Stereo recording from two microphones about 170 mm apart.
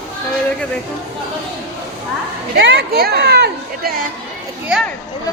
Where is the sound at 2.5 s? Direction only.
85° right.